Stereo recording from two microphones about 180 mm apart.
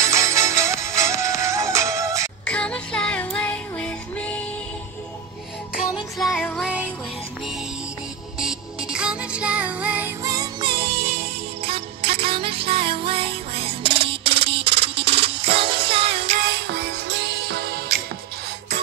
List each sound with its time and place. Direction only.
0.0 s music: 15° right (ahead or behind)
2.4 s child singing: 5° left (ahead or behind)
6.1 s music: centre (ahead or behind)
8.4 s music: 5° right (ahead or behind)
10.2 s music: 20° right (ahead or behind)
16.6 s music: 70° right (ahead or behind)
17.5 s music: 55° right (ahead or behind)